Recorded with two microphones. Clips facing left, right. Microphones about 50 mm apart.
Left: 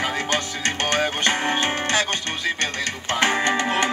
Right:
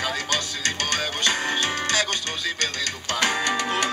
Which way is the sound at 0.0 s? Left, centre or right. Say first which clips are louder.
Left 3 dB; left.